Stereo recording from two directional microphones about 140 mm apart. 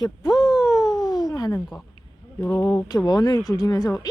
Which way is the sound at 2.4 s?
15° left (ahead or behind).